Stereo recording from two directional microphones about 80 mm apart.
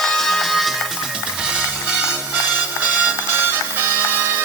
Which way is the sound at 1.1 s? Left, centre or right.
Centre.